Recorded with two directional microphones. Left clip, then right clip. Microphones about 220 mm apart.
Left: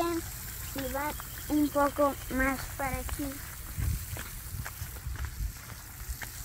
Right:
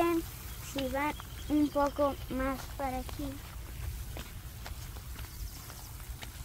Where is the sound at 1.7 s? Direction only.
15° left (ahead or behind).